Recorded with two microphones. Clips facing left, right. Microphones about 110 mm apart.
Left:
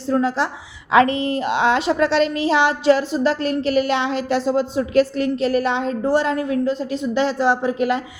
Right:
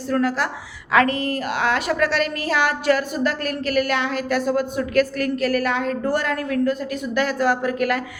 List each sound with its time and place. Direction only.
0.1 s a woman's voice: 25° left (ahead or behind)